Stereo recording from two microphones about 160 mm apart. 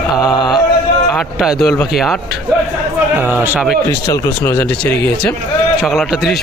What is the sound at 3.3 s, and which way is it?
Speech, 10° right (ahead or behind).